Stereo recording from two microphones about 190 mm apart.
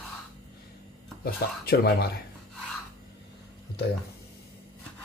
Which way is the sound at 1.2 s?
55° left (ahead or behind).